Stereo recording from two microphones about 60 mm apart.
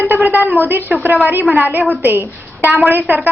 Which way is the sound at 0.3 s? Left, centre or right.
Right.